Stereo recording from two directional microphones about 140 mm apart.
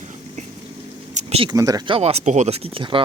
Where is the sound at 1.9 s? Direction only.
50° right (ahead or behind).